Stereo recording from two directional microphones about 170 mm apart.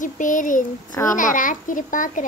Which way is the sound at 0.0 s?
50° left (ahead or behind).